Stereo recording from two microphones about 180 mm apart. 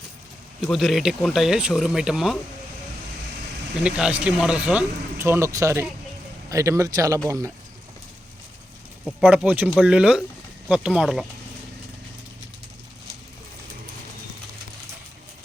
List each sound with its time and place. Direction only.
0.6 s speech: centre (ahead or behind)
3.8 s speech: 5° right (ahead or behind)
9.0 s speech: 5° right (ahead or behind)